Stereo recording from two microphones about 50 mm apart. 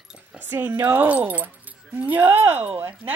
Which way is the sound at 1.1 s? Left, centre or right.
Right.